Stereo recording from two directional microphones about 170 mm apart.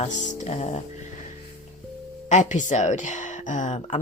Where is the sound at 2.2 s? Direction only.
45° left (ahead or behind).